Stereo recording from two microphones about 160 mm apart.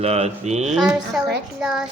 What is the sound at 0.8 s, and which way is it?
A woman's voice, centre (ahead or behind).